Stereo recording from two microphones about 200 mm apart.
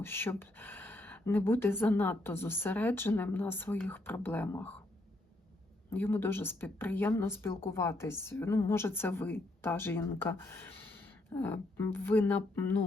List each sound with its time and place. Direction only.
0.0 s speech: 10° left (ahead or behind)
5.9 s speech: 10° left (ahead or behind)